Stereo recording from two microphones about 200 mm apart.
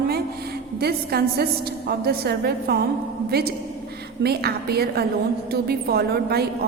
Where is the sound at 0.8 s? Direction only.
50° right (ahead or behind).